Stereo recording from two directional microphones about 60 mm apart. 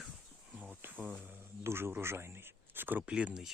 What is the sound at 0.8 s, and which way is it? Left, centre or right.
Speech, right.